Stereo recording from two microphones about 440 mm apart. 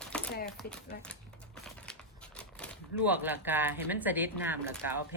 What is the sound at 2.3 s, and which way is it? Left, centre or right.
Speech, centre.